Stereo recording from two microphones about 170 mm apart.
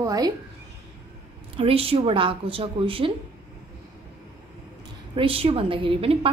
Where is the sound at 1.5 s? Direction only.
35° right (ahead or behind).